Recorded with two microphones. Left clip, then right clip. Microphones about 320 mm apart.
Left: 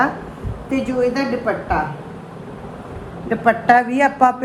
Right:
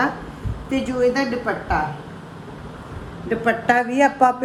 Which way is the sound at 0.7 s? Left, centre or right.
Centre.